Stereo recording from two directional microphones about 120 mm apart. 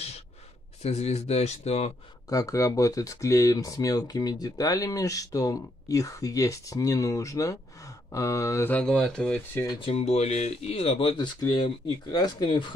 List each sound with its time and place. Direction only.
0.8 s speech: 60° left (ahead or behind)
2.2 s speech: 25° left (ahead or behind)
8.7 s speech: 5° left (ahead or behind)
9.8 s speech: 60° left (ahead or behind)
11.2 s speech: 40° left (ahead or behind)